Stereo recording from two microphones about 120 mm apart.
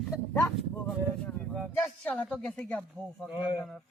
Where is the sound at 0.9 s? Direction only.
5° left (ahead or behind).